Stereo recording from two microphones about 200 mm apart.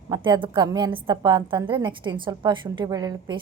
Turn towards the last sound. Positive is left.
turn(degrees=-20)  # may be behind; listen again after turning